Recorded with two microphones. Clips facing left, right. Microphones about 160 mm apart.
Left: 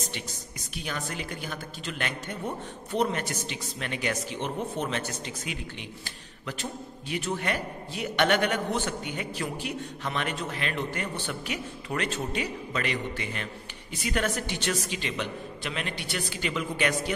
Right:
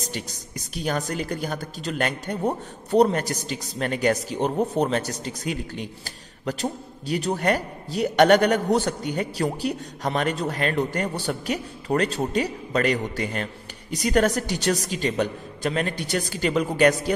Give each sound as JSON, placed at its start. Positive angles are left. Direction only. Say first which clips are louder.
{"t": 0.0, "sound": "speech", "louder": "right 4 dB", "side_deg": -40}